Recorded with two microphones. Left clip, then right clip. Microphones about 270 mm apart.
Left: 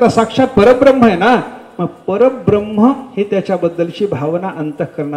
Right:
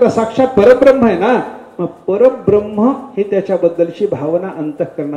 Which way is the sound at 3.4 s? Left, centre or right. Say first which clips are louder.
Right 3 dB; left.